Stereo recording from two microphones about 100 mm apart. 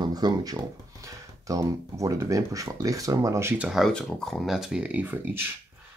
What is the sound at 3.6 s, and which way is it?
Speech, 5° right (ahead or behind).